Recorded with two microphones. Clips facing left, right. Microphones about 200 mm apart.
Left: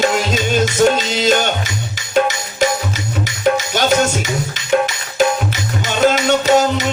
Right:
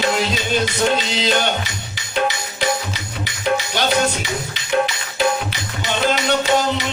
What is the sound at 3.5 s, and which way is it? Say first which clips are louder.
Music: left 4 dB; 45° left (ahead or behind).